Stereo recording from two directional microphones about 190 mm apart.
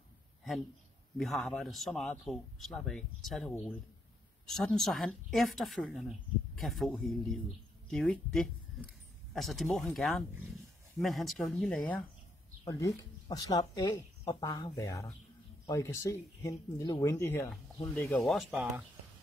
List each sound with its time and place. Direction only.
1.1 s speech: centre (ahead or behind)
12.6 s speech: 15° left (ahead or behind)
18.0 s speech: centre (ahead or behind)